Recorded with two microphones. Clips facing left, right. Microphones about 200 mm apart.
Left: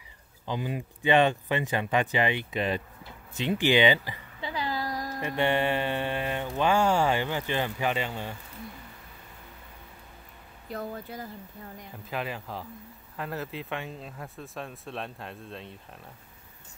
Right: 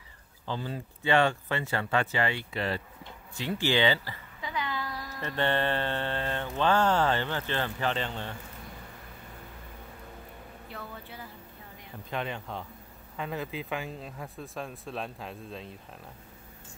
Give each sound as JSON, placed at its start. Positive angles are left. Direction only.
{"t": 0.5, "sound": "mantra", "side_deg": 15}
{"t": 4.4, "sound": "a sound", "side_deg": 30}
{"t": 5.2, "sound": "mantra", "side_deg": 10}
{"t": 10.7, "sound": "speech", "side_deg": 40}
{"t": 12.1, "sound": "speech", "side_deg": 5}